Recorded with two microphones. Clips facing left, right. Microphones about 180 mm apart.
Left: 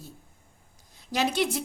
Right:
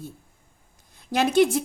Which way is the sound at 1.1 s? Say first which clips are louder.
Right 7 dB; 50° right (ahead or behind).